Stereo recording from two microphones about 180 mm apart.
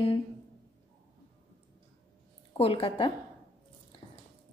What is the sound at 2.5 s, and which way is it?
Speech, 30° left (ahead or behind).